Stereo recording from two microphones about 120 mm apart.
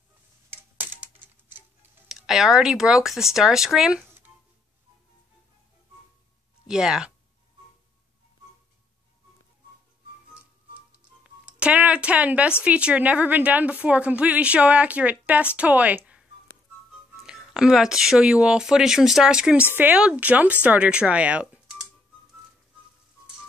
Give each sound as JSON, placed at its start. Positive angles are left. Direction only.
{"t": 0.5, "sound": "typewriter", "side_deg": -15}
{"t": 2.0, "sound": "speech", "side_deg": -5}
{"t": 6.7, "sound": "speech", "side_deg": -5}
{"t": 11.4, "sound": "a woman's voice", "side_deg": -10}
{"t": 17.3, "sound": "a woman's voice", "side_deg": -5}